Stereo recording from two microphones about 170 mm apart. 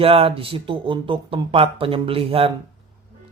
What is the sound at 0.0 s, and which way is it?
A man's voice, 35° right (ahead or behind).